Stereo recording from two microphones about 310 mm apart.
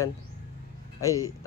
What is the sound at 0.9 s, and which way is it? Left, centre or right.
Speech, centre.